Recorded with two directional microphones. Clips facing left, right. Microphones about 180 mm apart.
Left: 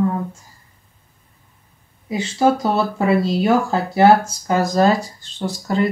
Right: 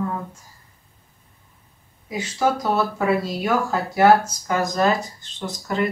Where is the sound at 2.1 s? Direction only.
30° left (ahead or behind).